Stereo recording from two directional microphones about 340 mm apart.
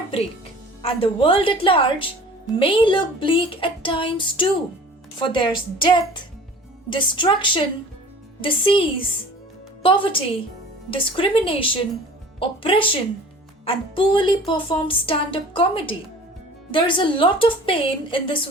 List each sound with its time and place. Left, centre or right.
0.8 s speech: centre
6.9 s speech: centre